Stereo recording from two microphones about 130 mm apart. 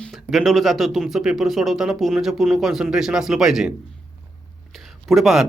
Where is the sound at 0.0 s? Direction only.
Centre (ahead or behind).